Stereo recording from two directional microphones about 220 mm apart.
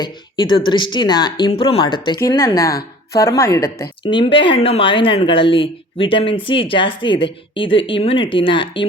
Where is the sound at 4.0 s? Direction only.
25° left (ahead or behind).